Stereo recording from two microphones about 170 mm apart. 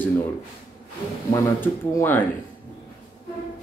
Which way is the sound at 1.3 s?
15° left (ahead or behind).